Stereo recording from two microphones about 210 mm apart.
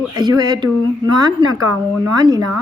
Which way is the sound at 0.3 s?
20° right (ahead or behind).